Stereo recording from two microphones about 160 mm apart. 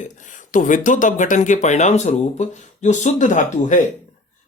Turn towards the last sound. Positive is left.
turn(degrees=50)  # may be behind; listen again after turning